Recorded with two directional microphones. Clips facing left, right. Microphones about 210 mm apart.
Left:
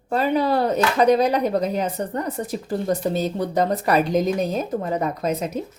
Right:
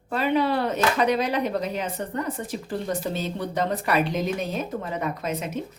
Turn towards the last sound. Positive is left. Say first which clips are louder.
# left 5 dB
turn(degrees=40)  # may be behind; listen again after turning